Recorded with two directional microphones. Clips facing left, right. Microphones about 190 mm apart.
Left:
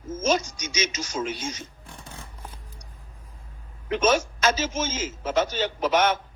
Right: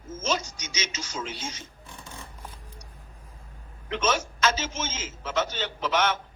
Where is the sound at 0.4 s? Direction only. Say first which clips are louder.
Left 7 dB; 15° left (ahead or behind).